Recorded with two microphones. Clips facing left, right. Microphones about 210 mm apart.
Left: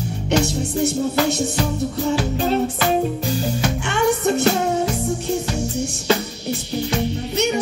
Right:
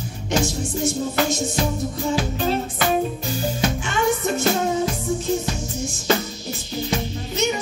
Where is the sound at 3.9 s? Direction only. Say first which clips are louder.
Left 5 dB; 70° left (ahead or behind).